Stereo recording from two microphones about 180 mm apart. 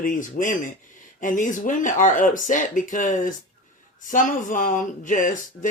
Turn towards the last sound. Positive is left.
turn(degrees=45)  # may be behind; listen again after turning